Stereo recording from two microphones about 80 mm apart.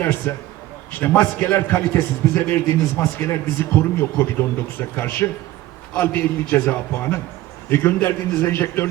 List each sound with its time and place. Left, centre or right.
0.0 s speech: left